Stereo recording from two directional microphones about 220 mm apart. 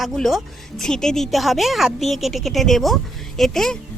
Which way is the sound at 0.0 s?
Centre (ahead or behind).